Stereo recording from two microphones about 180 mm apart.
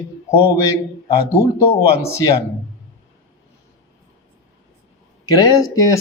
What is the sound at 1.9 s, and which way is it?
Speech, 15° left (ahead or behind).